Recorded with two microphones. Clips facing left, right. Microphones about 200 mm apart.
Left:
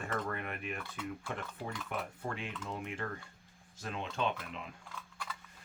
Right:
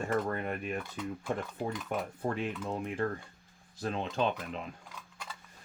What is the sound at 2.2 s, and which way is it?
Speech, 40° right (ahead or behind).